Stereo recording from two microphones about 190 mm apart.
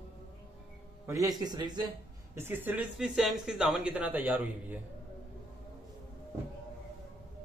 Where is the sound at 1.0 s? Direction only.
15° right (ahead or behind).